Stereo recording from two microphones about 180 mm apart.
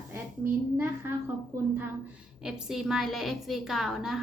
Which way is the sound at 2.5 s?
Centre (ahead or behind).